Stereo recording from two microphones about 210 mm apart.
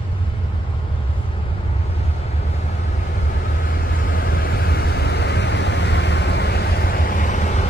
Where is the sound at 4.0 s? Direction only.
45° left (ahead or behind).